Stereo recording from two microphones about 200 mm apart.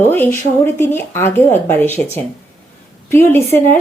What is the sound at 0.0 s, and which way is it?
Speech, 10° left (ahead or behind).